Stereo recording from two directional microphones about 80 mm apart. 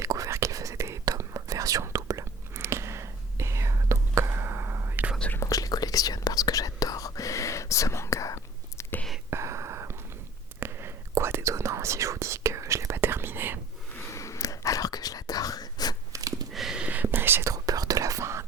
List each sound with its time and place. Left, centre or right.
0.0 s whispering: right
5.4 s whispering: left
9.3 s whispering: right
14.1 s whispering: left
16.1 s a sound: right
16.5 s a sound: centre
16.8 s whispering: right
17.4 s whispering: right